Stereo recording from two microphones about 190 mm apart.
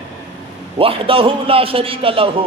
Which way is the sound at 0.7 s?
30° right (ahead or behind).